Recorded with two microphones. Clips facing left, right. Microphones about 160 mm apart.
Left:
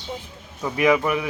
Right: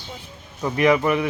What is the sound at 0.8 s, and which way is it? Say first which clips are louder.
Speech: right 1 dB; 5° left (ahead or behind).